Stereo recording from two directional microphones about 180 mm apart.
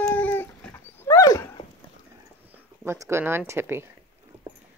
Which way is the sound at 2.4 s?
15° right (ahead or behind).